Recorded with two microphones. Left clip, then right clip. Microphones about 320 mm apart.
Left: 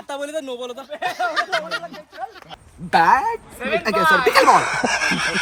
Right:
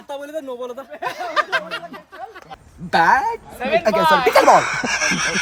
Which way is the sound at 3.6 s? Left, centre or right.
Right.